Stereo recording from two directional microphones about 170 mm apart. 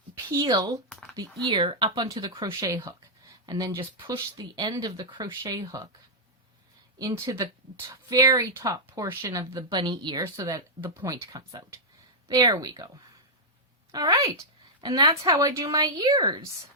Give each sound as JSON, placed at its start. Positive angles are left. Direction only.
{"t": 0.3, "sound": "speech", "side_deg": -25}
{"t": 7.0, "sound": "speech", "side_deg": -20}
{"t": 13.9, "sound": "a woman's voice", "side_deg": -25}